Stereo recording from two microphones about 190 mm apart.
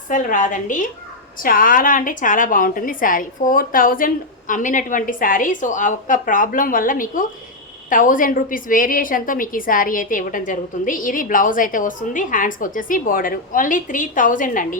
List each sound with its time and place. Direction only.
0.1 s a woman's voice: 45° left (ahead or behind)